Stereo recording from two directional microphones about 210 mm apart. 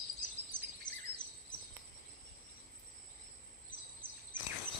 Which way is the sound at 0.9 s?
20° left (ahead or behind).